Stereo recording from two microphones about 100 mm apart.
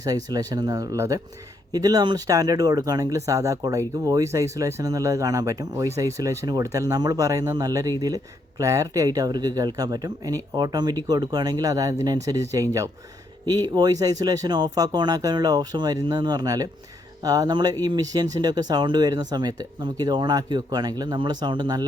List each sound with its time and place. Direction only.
0.0 s speech: 40° right (ahead or behind)